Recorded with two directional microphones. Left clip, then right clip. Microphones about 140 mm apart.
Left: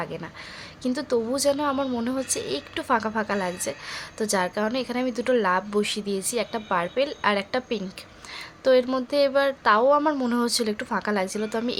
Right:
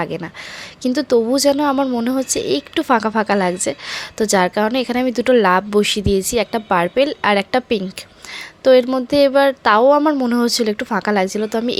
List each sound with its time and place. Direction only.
0.0 s speech: 50° right (ahead or behind)
8.6 s speech: 40° right (ahead or behind)
10.0 s speech: 30° right (ahead or behind)